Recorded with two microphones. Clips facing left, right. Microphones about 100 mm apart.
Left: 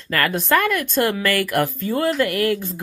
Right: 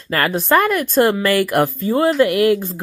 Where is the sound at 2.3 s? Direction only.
45° left (ahead or behind).